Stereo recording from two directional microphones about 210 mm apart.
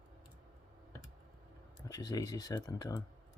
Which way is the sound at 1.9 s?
15° left (ahead or behind).